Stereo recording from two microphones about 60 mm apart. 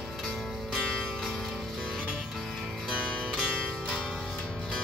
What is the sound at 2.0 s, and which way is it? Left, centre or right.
Music, right.